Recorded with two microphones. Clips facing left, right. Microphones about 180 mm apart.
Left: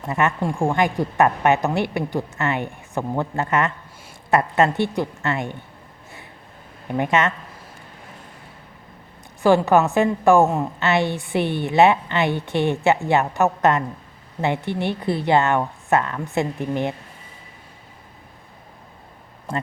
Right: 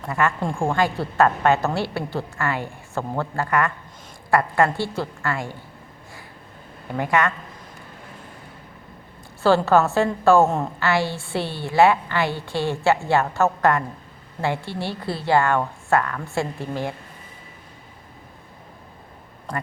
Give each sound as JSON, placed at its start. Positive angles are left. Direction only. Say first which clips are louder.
{"t": 0.1, "sound": "a woman's voice", "louder": "left 1 dB", "side_deg": 20}
{"t": 6.8, "sound": "a woman's voice", "louder": "left 1 dB", "side_deg": 20}
{"t": 9.6, "sound": "a woman's voice", "louder": "left 1 dB", "side_deg": 15}